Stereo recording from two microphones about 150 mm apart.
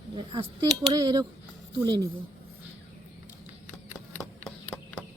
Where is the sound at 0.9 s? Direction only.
25° right (ahead or behind).